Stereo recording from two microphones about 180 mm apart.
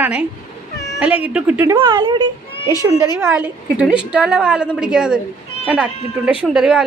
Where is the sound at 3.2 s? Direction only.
10° right (ahead or behind).